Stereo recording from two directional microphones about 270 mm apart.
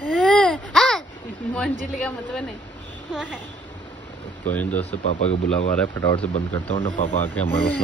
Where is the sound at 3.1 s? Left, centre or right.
Centre.